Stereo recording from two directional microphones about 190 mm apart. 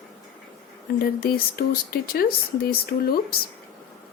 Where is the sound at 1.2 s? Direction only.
50° left (ahead or behind).